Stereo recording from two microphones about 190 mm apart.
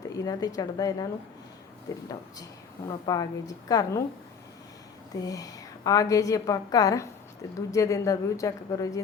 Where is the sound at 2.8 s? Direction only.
20° left (ahead or behind).